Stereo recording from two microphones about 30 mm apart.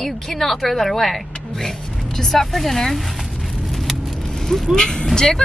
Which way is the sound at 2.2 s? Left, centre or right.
Centre.